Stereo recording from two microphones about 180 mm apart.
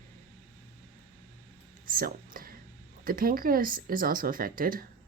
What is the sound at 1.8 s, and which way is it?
Whispering, 50° right (ahead or behind).